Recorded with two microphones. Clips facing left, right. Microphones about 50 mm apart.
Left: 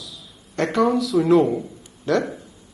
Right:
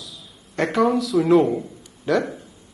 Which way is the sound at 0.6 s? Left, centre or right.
Centre.